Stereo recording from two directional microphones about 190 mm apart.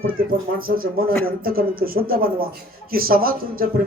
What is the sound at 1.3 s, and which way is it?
Speech, 50° right (ahead or behind).